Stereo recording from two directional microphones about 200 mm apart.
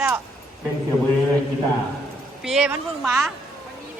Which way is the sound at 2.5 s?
5° right (ahead or behind).